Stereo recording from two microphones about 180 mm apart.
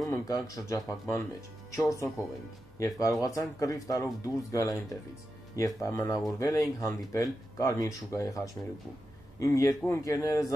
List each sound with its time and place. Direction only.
0.1 s speech: 15° left (ahead or behind)